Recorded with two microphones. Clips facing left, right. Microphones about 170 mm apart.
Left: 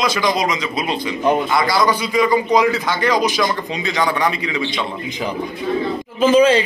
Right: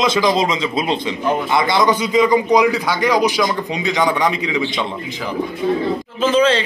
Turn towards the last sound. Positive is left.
turn(degrees=10)  # may be behind; listen again after turning